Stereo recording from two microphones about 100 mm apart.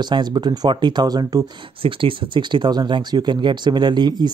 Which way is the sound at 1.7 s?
60° right (ahead or behind).